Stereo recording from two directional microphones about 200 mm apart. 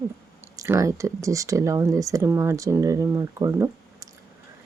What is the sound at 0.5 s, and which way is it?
Speech, 15° right (ahead or behind).